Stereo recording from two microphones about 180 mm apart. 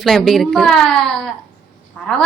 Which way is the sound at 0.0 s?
Centre (ahead or behind).